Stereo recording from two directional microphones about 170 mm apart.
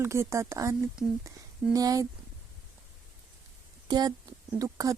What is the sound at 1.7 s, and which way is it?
Speech, 20° right (ahead or behind).